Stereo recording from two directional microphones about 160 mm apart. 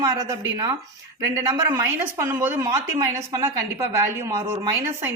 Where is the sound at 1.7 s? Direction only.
15° right (ahead or behind).